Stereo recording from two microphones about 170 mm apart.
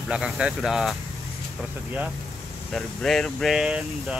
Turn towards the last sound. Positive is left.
turn(degrees=-5)  # may be behind; listen again after turning